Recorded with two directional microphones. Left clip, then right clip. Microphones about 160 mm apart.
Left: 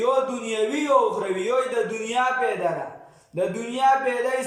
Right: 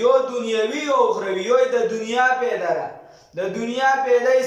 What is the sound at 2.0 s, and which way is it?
Speech, 20° left (ahead or behind).